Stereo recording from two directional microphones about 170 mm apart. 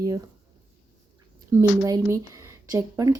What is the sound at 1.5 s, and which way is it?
Speech, 20° right (ahead or behind).